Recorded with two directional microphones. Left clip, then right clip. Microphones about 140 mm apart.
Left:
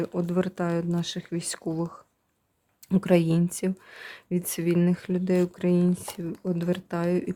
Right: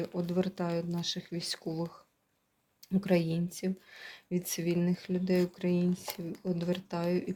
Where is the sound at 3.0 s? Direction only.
45° left (ahead or behind).